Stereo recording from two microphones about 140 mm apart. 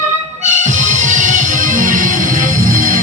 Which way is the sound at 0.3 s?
60° right (ahead or behind).